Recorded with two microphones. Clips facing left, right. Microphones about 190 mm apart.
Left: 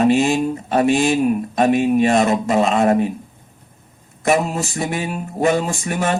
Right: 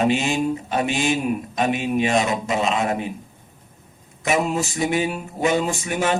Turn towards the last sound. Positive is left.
turn(degrees=50)  # may be behind; listen again after turning